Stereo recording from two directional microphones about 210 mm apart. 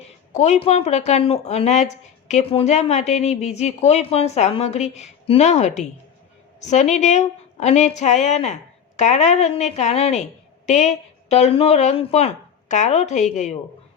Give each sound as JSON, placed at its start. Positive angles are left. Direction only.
{"t": 0.3, "sound": "speech", "side_deg": 30}